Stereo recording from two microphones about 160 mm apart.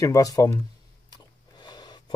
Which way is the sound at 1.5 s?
25° left (ahead or behind).